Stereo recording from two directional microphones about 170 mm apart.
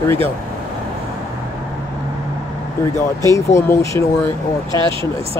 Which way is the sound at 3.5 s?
15° left (ahead or behind).